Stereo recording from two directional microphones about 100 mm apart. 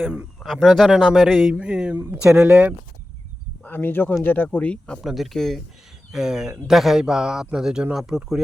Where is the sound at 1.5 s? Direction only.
10° right (ahead or behind).